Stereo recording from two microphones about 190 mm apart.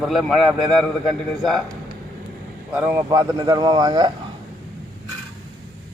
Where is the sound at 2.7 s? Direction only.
10° right (ahead or behind).